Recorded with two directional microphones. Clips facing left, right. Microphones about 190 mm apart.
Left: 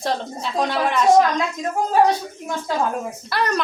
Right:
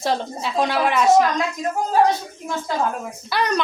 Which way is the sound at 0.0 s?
5° right (ahead or behind).